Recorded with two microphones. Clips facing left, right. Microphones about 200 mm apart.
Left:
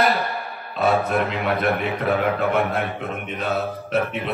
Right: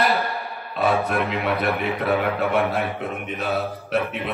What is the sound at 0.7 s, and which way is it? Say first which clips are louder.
A man's voice: left 1 dB; centre (ahead or behind).